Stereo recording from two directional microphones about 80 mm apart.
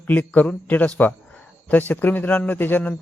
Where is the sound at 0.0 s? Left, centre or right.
Centre.